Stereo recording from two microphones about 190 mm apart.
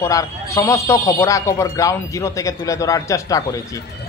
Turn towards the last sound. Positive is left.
turn(degrees=15)  # may be behind; listen again after turning